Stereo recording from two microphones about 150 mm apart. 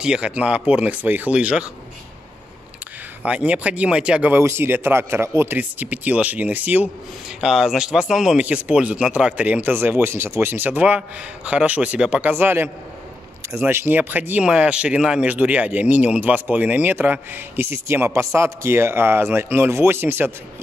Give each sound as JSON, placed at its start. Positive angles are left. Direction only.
{"t": 0.0, "sound": "speech", "side_deg": -5}
{"t": 3.3, "sound": "speech", "side_deg": -10}
{"t": 13.7, "sound": "speech", "side_deg": -15}